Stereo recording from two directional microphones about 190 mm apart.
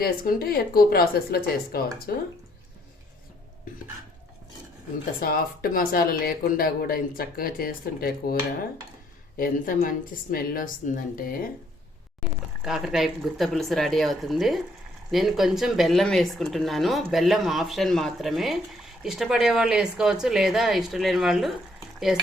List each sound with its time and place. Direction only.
0.0 s speech: 55° left (ahead or behind)
5.2 s speech: 50° left (ahead or behind)
9.4 s speech: 45° left (ahead or behind)
12.6 s speech: centre (ahead or behind)